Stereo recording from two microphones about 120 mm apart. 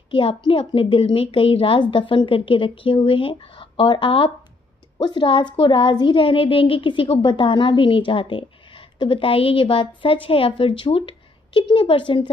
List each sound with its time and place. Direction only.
0.1 s a woman's voice: 45° left (ahead or behind)